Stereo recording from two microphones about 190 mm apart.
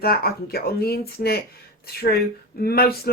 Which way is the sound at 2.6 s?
55° left (ahead or behind).